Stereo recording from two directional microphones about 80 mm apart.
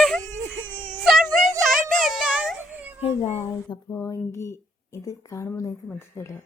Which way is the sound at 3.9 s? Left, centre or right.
Left.